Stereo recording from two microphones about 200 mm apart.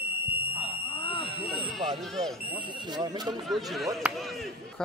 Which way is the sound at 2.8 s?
20° right (ahead or behind).